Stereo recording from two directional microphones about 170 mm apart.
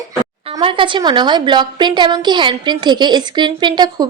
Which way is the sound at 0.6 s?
30° right (ahead or behind).